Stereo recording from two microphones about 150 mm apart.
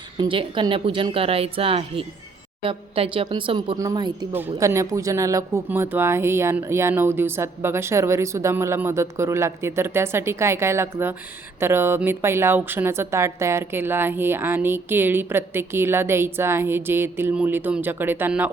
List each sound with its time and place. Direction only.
0.2 s speech: 35° right (ahead or behind)
3.8 s speech: 25° right (ahead or behind)
4.3 s a woman's voice: 15° right (ahead or behind)